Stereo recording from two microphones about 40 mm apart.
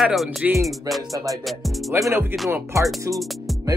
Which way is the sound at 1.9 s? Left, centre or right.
Right.